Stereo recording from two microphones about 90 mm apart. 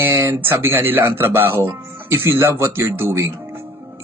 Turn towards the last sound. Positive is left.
turn(degrees=-30)  # may be behind; listen again after turning